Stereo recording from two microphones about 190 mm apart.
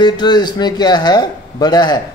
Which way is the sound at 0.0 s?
20° left (ahead or behind).